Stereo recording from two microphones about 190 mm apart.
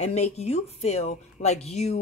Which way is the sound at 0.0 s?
35° left (ahead or behind).